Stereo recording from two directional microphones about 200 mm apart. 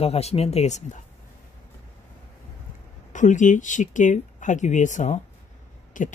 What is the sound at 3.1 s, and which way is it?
Speech, 40° left (ahead or behind).